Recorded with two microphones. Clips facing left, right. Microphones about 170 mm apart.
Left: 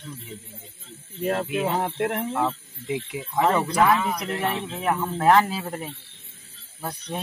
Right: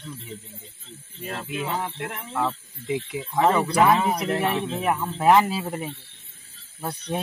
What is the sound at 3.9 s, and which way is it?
Speech, 30° right (ahead or behind).